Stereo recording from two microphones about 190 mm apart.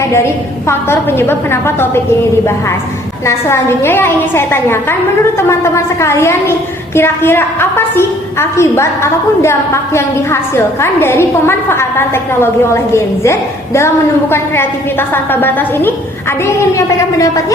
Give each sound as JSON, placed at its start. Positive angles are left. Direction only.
{"t": 0.0, "sound": "a woman's voice", "side_deg": 15}
{"t": 3.2, "sound": "a woman's voice", "side_deg": 15}